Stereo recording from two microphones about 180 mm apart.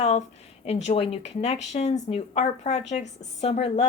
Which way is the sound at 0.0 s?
35° left (ahead or behind).